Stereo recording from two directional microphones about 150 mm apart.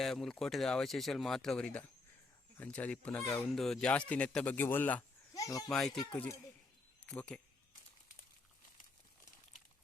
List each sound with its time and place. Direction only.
0.0 s speech: centre (ahead or behind)
5.3 s a sound: 25° left (ahead or behind)
5.7 s speech: 5° left (ahead or behind)